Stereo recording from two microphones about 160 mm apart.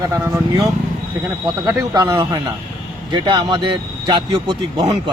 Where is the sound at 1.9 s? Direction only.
25° right (ahead or behind).